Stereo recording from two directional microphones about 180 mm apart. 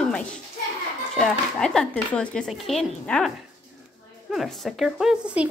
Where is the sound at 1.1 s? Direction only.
5° left (ahead or behind).